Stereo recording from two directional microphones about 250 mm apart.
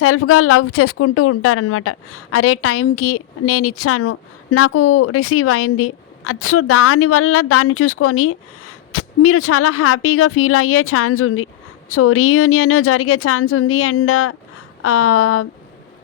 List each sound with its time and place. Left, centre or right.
0.0 s a woman's voice: left